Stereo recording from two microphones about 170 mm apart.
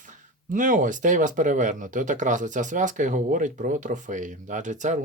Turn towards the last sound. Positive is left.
turn(degrees=-45)  # may be behind; listen again after turning